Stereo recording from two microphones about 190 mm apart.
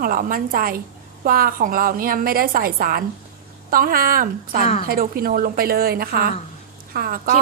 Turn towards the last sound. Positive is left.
turn(degrees=-50)  # may be behind; listen again after turning